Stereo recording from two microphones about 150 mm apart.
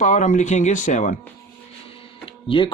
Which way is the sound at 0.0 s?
55° left (ahead or behind).